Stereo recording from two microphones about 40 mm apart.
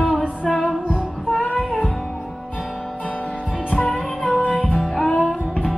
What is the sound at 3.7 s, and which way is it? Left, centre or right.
Music, centre.